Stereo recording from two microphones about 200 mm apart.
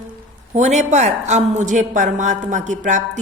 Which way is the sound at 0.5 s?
35° right (ahead or behind).